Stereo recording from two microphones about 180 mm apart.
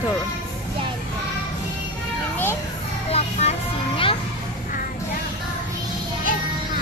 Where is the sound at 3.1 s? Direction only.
35° left (ahead or behind).